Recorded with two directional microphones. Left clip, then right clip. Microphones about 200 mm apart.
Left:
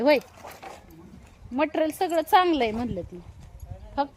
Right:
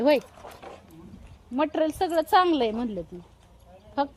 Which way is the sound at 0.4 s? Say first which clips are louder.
Left 1 dB; 50° left (ahead or behind).